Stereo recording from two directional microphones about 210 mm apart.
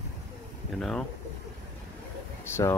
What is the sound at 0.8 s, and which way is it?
Speech, centre (ahead or behind).